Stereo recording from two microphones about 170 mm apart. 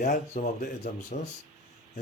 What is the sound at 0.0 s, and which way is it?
Speech, 55° left (ahead or behind).